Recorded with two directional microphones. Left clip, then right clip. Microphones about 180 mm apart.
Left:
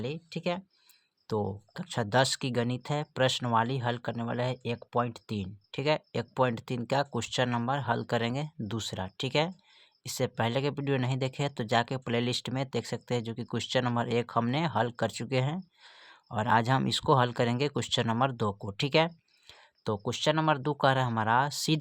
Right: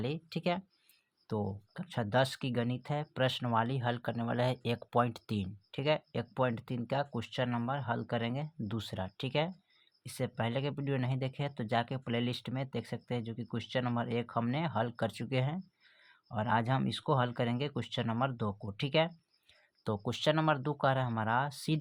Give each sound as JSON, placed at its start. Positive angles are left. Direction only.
{"t": 0.0, "sound": "speech", "side_deg": 0}
{"t": 1.3, "sound": "speech", "side_deg": 25}